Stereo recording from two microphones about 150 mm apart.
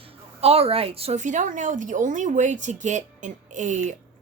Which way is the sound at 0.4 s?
40° right (ahead or behind).